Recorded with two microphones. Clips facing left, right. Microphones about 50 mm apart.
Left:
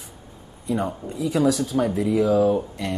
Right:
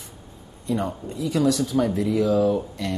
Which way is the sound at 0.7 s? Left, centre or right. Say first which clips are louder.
Left 1 dB; centre.